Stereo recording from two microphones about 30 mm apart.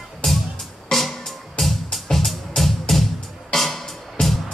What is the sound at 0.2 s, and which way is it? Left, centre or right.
Music, centre.